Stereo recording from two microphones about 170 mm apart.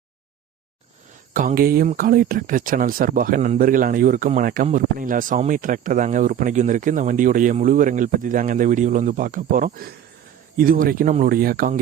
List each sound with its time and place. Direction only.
1.3 s speech: 55° right (ahead or behind)